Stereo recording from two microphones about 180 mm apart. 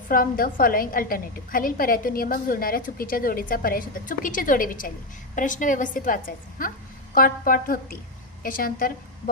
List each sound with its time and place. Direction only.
0.1 s a woman's voice: 50° left (ahead or behind)